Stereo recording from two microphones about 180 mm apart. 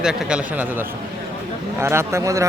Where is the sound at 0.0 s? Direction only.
5° right (ahead or behind).